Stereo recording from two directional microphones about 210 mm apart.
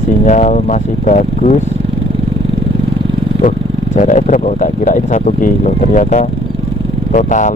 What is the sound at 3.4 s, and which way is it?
Speech, 40° left (ahead or behind).